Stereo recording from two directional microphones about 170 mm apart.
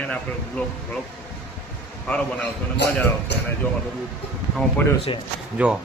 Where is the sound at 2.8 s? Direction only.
85° left.